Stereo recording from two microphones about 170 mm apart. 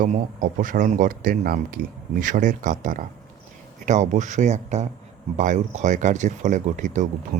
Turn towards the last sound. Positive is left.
turn(degrees=-45)  # may be behind; listen again after turning